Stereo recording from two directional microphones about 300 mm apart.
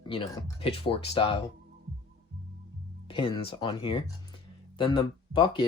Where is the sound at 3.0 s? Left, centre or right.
Centre.